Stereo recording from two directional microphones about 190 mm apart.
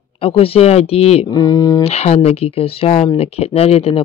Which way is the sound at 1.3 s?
20° left (ahead or behind).